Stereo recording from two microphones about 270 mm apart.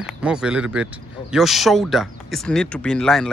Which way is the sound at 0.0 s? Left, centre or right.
Centre.